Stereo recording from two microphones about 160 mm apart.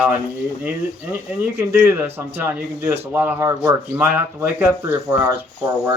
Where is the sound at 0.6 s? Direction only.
10° right (ahead or behind).